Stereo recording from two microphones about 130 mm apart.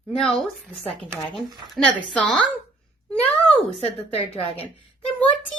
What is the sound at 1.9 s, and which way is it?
Speech, 10° left (ahead or behind).